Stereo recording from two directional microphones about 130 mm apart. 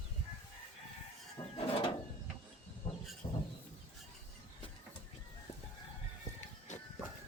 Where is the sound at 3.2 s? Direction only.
35° left (ahead or behind).